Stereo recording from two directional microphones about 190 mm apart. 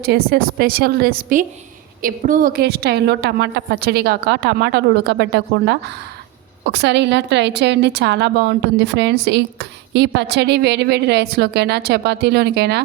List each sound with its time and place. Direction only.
0.0 s a woman's voice: 55° right (ahead or behind)